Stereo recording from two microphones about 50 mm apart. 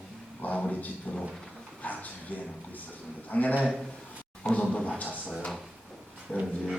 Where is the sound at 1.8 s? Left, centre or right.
Left.